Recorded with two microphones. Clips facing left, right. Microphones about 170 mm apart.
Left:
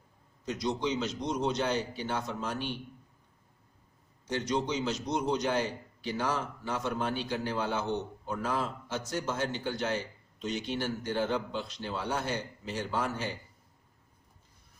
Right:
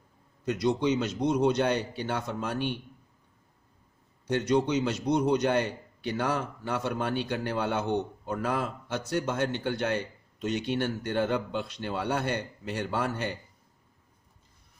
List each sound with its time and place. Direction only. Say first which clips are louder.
0.4 s a man's voice: right 6 dB; 60° right (ahead or behind)
4.3 s a man's voice: right 6 dB; 55° right (ahead or behind)